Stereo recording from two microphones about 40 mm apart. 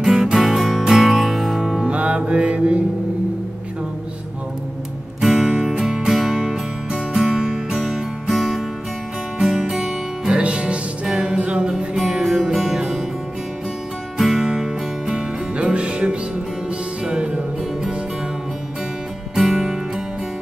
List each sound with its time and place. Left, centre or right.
0.0 s music: centre
1.9 s music: right
5.2 s music: centre
9.4 s music: centre
11.9 s music: centre
14.1 s music: centre
19.3 s music: centre